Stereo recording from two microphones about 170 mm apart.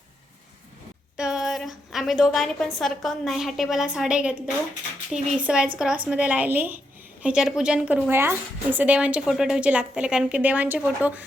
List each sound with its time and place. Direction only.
1.1 s a woman's voice: 5° right (ahead or behind)